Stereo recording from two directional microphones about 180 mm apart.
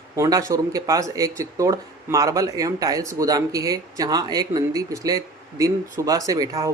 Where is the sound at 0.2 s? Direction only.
20° right (ahead or behind).